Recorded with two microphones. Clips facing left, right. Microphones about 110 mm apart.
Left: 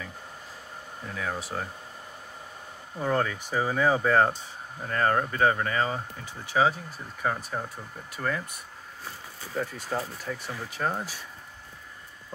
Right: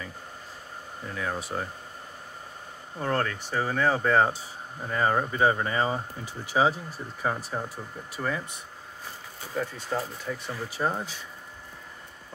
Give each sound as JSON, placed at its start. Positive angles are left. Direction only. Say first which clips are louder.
{"t": 1.0, "sound": "speech", "louder": "right 1 dB", "side_deg": 0}
{"t": 3.0, "sound": "speech", "louder": "left 1 dB", "side_deg": 5}
{"t": 7.2, "sound": "speech", "louder": "even", "side_deg": -10}
{"t": 9.6, "sound": "speech", "louder": "right 1 dB", "side_deg": 5}